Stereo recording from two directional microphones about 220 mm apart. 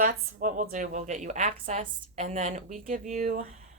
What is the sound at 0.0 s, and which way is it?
Speech, 35° right (ahead or behind).